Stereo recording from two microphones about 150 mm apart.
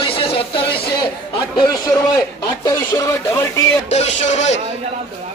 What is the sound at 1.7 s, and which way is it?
Speech, 25° left (ahead or behind).